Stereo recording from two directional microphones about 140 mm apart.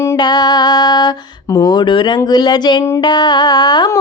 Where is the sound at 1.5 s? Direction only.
25° left (ahead or behind).